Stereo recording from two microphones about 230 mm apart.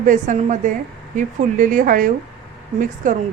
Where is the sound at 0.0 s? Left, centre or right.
Right.